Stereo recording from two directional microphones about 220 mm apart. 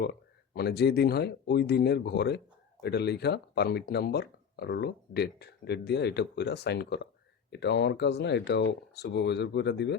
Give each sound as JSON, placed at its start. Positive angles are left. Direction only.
{"t": 0.0, "sound": "speech", "side_deg": 45}